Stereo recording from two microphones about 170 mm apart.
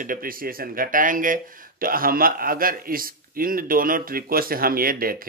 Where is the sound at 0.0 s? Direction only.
55° right (ahead or behind).